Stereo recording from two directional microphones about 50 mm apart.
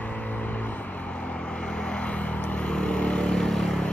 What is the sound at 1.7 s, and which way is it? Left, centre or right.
Vehicle, centre.